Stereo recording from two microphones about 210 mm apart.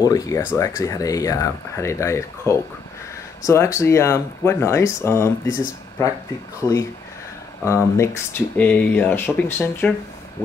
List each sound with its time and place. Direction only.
0.0 s speech: 15° left (ahead or behind)
7.6 s speech: 15° left (ahead or behind)